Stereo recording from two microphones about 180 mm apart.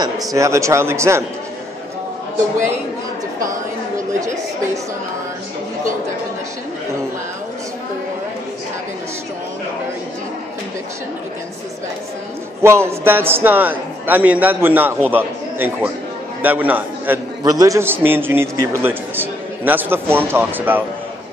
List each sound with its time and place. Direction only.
0.0 s a man's voice: 20° right (ahead or behind)
12.6 s a man's voice: 15° right (ahead or behind)
17.4 s a man's voice: 20° right (ahead or behind)